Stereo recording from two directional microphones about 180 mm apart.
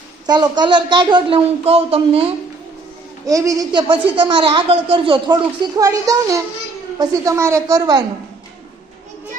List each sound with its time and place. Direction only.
0.3 s speech: 25° right (ahead or behind)
3.2 s speech: 20° right (ahead or behind)